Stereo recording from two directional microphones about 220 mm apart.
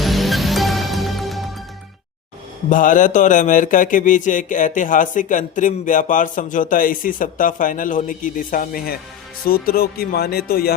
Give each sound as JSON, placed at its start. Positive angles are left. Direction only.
{"t": 0.0, "sound": "music", "side_deg": 0}
{"t": 2.6, "sound": "speech", "side_deg": 35}